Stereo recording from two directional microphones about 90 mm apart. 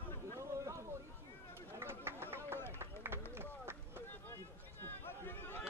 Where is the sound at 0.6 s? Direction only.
35° right (ahead or behind).